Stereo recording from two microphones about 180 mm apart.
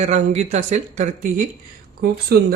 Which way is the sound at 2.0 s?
55° right (ahead or behind).